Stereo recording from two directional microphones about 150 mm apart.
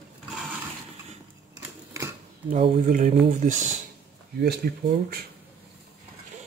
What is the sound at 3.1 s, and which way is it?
Speech, 50° right (ahead or behind).